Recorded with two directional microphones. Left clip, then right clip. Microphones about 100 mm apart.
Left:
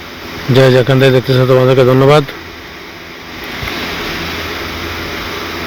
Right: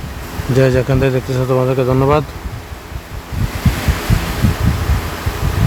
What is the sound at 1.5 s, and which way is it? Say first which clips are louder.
Speech: left 6 dB; 25° left (ahead or behind).